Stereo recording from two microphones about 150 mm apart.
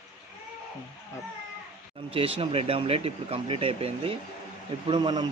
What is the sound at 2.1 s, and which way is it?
Speech, 40° right (ahead or behind).